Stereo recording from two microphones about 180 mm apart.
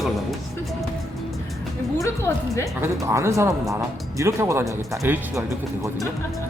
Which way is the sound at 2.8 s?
15° right (ahead or behind).